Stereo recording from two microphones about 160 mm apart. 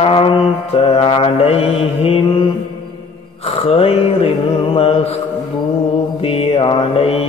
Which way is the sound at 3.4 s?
35° left (ahead or behind).